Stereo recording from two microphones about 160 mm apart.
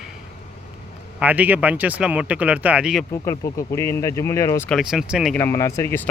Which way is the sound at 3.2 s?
20° left (ahead or behind).